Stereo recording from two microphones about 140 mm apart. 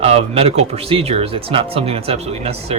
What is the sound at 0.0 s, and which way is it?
Speech, 45° right (ahead or behind).